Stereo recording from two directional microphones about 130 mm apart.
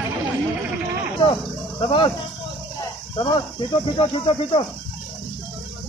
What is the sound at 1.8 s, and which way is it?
Speech, 40° left (ahead or behind).